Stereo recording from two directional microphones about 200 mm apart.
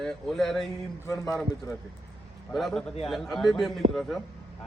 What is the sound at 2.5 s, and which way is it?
Speech, centre (ahead or behind).